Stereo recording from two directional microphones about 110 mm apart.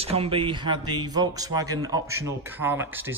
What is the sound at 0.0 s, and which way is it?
Speech, 60° right (ahead or behind).